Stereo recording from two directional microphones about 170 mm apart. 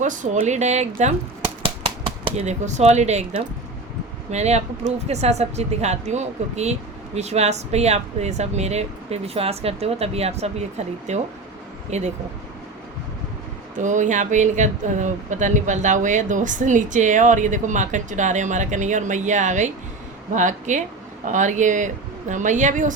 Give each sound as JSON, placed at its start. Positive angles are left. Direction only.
{"t": 0.0, "sound": "speech", "side_deg": -50}
{"t": 1.6, "sound": "a sound", "side_deg": -30}
{"t": 4.3, "sound": "speech", "side_deg": -40}
{"t": 13.7, "sound": "speech", "side_deg": -45}